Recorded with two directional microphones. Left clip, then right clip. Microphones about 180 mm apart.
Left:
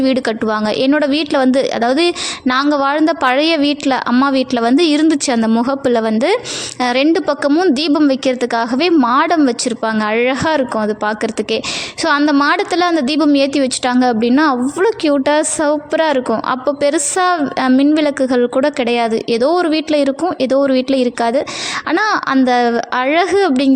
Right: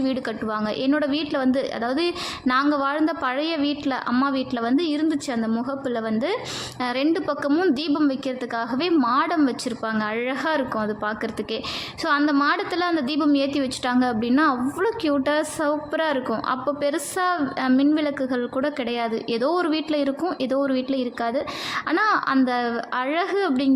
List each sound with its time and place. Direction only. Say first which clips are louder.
0.0 s a woman's voice: left 11 dB; 45° left (ahead or behind)